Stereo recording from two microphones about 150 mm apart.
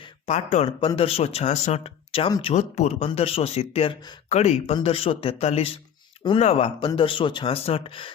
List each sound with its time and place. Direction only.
0.3 s speech: 45° left (ahead or behind)
2.6 s speech: 50° left (ahead or behind); by 4.2 s 35° left (ahead or behind)
4.3 s speech: 45° left (ahead or behind)